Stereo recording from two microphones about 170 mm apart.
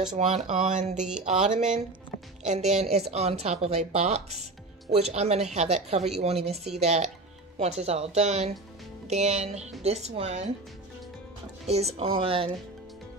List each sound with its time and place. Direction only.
0.1 s speech: 45° right (ahead or behind)
0.9 s speech: 5° right (ahead or behind)
2.4 s a woman's voice: 40° right (ahead or behind)
11.6 s a woman's voice: 40° right (ahead or behind)